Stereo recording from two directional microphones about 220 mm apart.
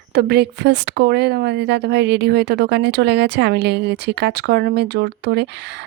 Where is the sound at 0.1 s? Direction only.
45° right (ahead or behind).